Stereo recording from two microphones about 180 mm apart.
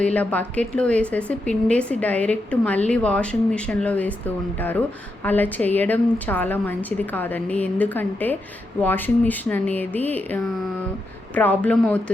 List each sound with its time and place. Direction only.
0.0 s a woman's voice: 10° left (ahead or behind)
5.2 s a woman's voice: 10° left (ahead or behind)